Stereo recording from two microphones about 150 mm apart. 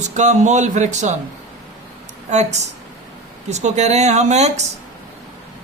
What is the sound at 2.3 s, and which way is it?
A man's voice, 50° right (ahead or behind).